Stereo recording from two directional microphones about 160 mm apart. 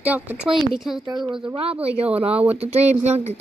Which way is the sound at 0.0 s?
10° right (ahead or behind).